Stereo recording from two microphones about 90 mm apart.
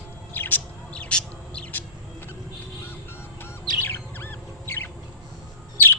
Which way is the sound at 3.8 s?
25° left (ahead or behind).